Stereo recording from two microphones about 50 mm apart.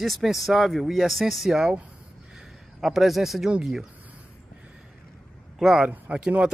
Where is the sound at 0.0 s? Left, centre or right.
Centre.